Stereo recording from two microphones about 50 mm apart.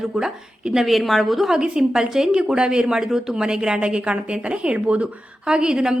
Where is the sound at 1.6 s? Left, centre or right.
Centre.